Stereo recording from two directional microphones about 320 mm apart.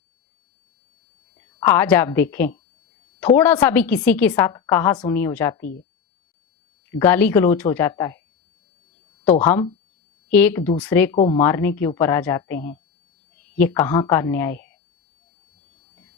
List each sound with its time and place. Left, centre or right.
1.4 s a woman's voice: centre
6.9 s a woman's voice: centre
9.2 s speech: centre
11.2 s speech: left
11.4 s a woman's voice: centre